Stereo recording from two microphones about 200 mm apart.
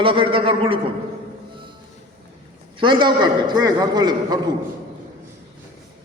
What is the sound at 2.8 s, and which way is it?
A man's voice, 25° right (ahead or behind).